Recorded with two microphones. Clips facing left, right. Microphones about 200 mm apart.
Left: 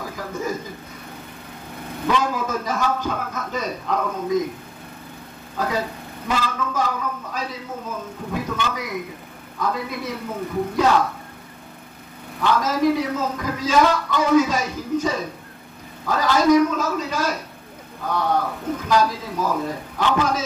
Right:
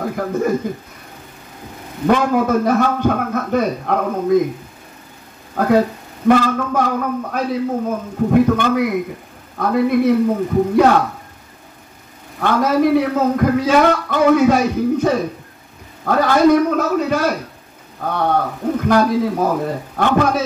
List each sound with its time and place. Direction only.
0.0 s a man's voice: 60° right (ahead or behind)
2.0 s speech: 60° right (ahead or behind)
5.6 s speech: 55° right (ahead or behind)
12.4 s speech: 60° right (ahead or behind)